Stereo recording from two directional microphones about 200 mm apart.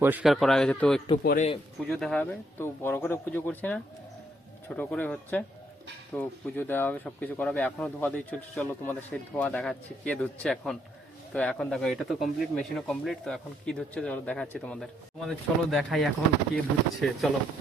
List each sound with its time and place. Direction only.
0.0 s speech: 5° right (ahead or behind)
1.2 s speech: 45° left (ahead or behind)
1.9 s speech: centre (ahead or behind)